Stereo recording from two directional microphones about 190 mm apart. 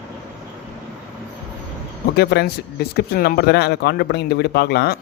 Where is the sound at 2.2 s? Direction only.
60° left (ahead or behind).